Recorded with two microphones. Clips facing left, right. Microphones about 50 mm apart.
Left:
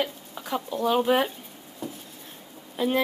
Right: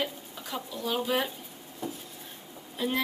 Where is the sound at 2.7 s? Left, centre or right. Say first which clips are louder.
Left 5 dB; left.